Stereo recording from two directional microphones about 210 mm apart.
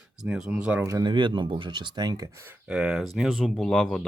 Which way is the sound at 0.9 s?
20° right (ahead or behind).